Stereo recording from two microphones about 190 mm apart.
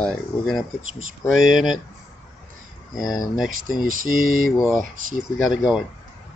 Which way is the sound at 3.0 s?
20° left (ahead or behind).